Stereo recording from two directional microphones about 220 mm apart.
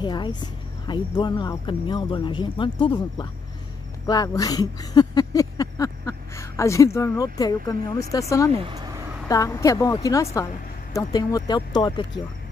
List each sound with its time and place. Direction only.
0.0 s speech: 20° left (ahead or behind)
8.5 s speech: 20° right (ahead or behind)
9.3 s a woman's voice: 15° left (ahead or behind)